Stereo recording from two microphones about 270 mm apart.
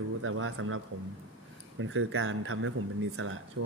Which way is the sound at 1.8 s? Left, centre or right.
Right.